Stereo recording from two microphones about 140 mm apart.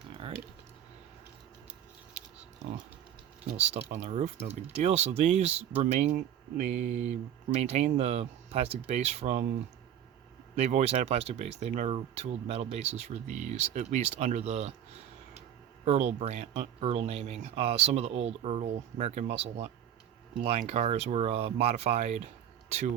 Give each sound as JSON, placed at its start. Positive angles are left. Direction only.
{"t": 3.6, "sound": "speech", "side_deg": -50}
{"t": 10.5, "sound": "speech", "side_deg": -55}